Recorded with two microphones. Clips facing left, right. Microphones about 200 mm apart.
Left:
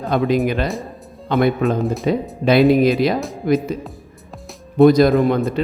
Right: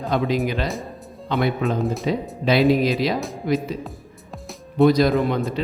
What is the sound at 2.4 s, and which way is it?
Speech, 50° left (ahead or behind).